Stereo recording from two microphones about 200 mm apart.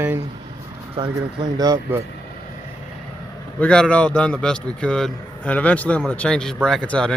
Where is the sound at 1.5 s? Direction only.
20° right (ahead or behind).